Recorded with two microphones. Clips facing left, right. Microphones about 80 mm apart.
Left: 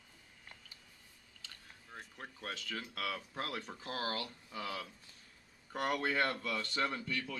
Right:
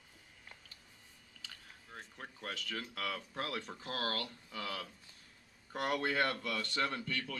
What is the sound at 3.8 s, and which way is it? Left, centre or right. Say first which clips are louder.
Speech: even; centre.